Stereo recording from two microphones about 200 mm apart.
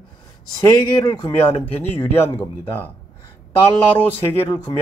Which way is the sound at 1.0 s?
20° left (ahead or behind).